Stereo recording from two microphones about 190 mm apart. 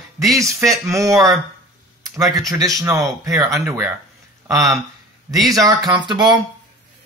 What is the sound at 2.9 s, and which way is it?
Speech, 15° right (ahead or behind).